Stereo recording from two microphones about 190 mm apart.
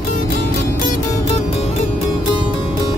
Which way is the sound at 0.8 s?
35° left (ahead or behind).